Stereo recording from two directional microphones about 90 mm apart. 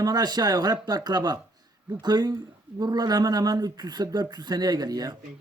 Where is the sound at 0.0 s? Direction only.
45° right (ahead or behind).